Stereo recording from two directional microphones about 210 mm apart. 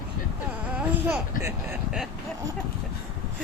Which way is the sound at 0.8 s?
10° right (ahead or behind).